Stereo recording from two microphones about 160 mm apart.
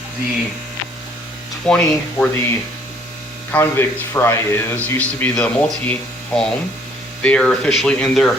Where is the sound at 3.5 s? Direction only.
15° left (ahead or behind).